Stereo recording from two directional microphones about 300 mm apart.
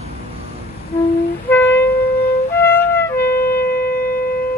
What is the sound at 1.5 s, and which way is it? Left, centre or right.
Wind instrument, centre.